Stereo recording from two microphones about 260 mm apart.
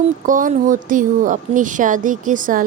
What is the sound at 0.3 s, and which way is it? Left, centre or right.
Speech, right.